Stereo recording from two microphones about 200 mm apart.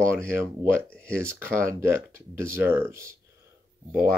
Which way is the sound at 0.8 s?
5° left (ahead or behind).